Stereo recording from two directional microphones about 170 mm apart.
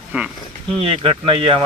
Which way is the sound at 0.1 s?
5° right (ahead or behind).